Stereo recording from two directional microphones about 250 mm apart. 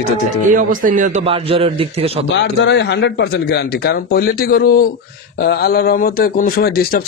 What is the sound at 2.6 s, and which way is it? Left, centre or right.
A man's voice, left.